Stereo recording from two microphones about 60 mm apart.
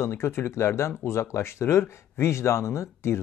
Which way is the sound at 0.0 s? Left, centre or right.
Left.